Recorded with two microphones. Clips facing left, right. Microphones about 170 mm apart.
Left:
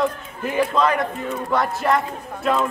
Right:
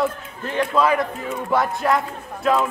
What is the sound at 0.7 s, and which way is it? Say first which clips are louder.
A woman's voice: right 1 dB; 5° right (ahead or behind).